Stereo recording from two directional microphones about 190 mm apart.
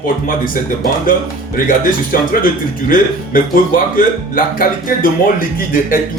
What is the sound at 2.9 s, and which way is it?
Speech, 45° left (ahead or behind).